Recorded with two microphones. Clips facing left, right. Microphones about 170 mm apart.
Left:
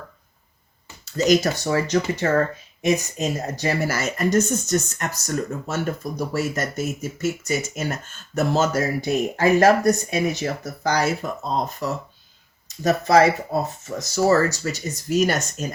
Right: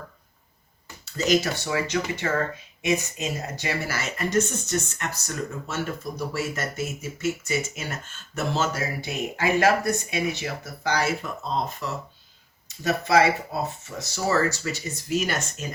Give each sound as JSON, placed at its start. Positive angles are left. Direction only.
{"t": 1.1, "sound": "speech", "side_deg": 40}